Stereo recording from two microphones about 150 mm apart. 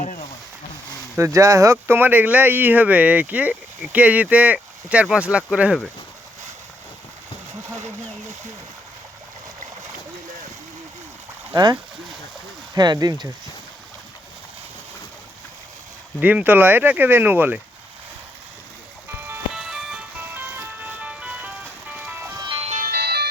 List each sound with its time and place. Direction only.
0.0 s a sound: 55° left (ahead or behind)
1.1 s speech: 20° right (ahead or behind)
11.5 s speech: 25° right (ahead or behind)
16.2 s speech: 10° right (ahead or behind)
19.5 s music: 5° right (ahead or behind)
22.8 s music: 90° right